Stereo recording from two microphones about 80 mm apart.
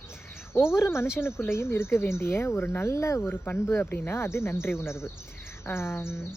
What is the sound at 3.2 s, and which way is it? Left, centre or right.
Speech, left.